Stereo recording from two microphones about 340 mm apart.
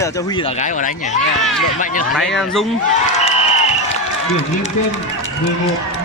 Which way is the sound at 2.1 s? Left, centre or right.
Centre.